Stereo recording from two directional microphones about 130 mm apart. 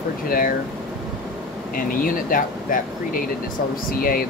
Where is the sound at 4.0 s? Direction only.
90° left.